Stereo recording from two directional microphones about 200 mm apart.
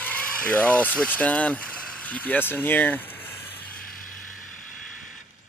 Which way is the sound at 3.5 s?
45° left (ahead or behind).